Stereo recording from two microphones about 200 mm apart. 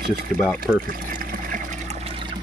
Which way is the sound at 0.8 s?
45° right (ahead or behind).